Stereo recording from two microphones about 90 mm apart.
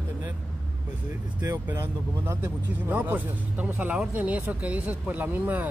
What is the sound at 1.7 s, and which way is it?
Speech, 30° right (ahead or behind).